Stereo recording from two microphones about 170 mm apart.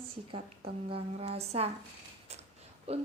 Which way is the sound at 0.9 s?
35° right (ahead or behind).